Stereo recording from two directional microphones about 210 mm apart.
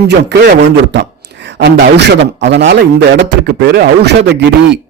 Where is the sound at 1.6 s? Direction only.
50° right (ahead or behind).